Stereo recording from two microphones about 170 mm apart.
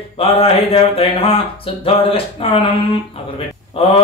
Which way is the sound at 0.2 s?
35° left (ahead or behind).